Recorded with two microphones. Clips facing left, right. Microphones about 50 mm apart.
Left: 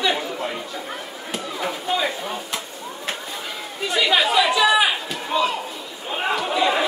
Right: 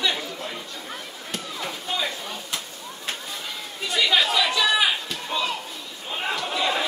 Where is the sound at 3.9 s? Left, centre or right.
Centre.